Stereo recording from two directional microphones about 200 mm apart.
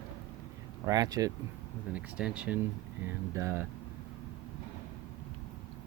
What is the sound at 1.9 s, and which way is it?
Speech, 5° right (ahead or behind).